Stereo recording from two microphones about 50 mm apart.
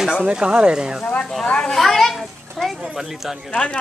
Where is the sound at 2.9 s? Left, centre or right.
Centre.